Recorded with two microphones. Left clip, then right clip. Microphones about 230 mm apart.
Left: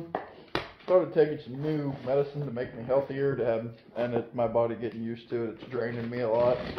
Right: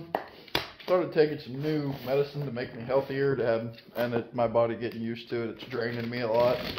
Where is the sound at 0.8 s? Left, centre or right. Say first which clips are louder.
Left 2 dB; right.